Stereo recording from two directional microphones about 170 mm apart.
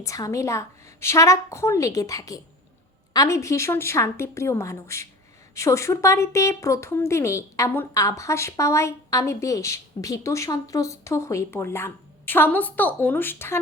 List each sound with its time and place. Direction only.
0.0 s speech: 20° left (ahead or behind)